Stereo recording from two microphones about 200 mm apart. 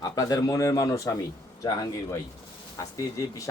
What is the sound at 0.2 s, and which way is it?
A man's voice, 20° left (ahead or behind).